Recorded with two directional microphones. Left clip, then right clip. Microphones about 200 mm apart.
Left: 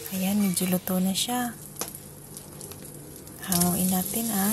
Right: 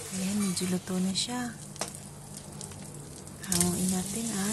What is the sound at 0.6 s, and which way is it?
Speech, 20° left (ahead or behind).